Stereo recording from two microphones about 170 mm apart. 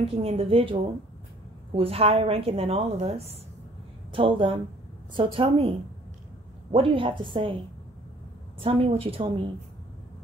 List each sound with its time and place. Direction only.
0.0 s a woman's voice: 35° right (ahead or behind)
8.6 s a woman's voice: 35° right (ahead or behind)